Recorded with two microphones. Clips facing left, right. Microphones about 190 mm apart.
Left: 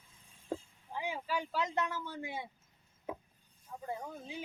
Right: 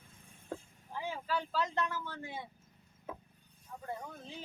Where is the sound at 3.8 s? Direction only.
10° left (ahead or behind).